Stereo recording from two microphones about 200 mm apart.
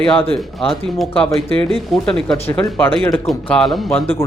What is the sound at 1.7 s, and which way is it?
Speech, centre (ahead or behind).